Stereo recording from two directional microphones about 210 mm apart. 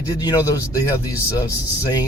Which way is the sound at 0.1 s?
15° left (ahead or behind).